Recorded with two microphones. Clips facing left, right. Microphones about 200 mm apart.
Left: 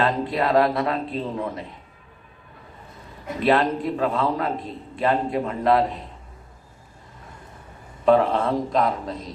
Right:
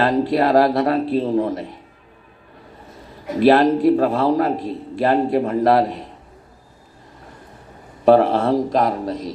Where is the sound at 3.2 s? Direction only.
35° right (ahead or behind).